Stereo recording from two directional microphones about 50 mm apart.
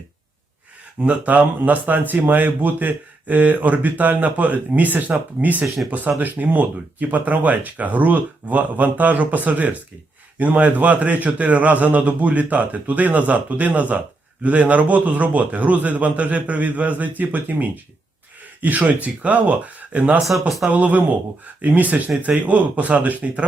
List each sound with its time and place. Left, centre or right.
1.0 s speech: right
5.6 s speech: centre
5.9 s speech: right